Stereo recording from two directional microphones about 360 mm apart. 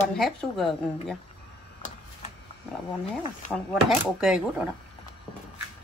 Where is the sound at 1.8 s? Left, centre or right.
Centre.